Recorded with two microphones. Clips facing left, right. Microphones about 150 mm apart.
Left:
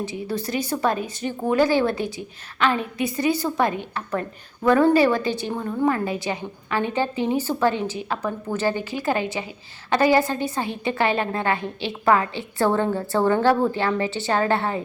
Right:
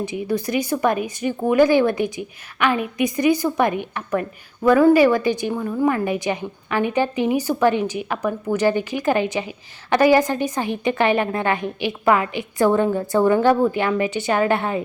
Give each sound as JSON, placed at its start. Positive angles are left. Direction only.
{"t": 0.0, "sound": "a woman's voice", "side_deg": -15}